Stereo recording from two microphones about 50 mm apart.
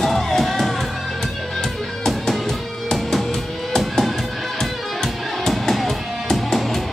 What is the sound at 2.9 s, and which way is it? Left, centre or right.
Music, centre.